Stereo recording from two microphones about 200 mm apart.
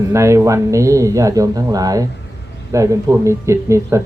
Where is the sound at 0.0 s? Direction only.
15° right (ahead or behind).